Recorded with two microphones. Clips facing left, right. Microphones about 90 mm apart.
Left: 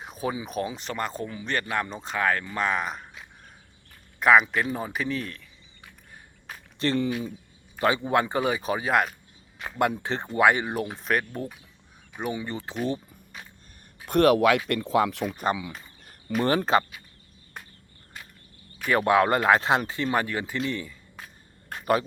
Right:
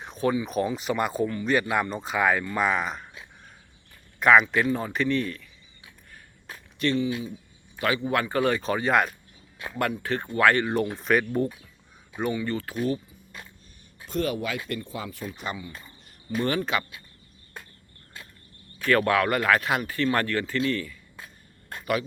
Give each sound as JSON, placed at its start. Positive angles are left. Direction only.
{"t": 0.0, "sound": "speech", "side_deg": 5}
{"t": 1.3, "sound": "speech", "side_deg": 5}
{"t": 1.5, "sound": "speech", "side_deg": -10}
{"t": 4.2, "sound": "speech", "side_deg": 0}
{"t": 6.9, "sound": "speech", "side_deg": 45}
{"t": 7.8, "sound": "speech", "side_deg": 30}
{"t": 10.0, "sound": "speech", "side_deg": 25}
{"t": 10.9, "sound": "speech", "side_deg": 0}
{"t": 12.3, "sound": "speech", "side_deg": 20}
{"t": 14.1, "sound": "speech", "side_deg": 70}
{"t": 16.4, "sound": "speech", "side_deg": 35}
{"t": 18.8, "sound": "speech", "side_deg": 15}